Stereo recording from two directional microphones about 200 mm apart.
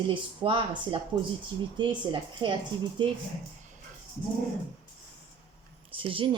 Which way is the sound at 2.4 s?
25° right (ahead or behind).